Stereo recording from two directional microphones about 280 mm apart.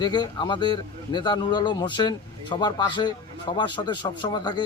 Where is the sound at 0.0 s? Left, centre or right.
Centre.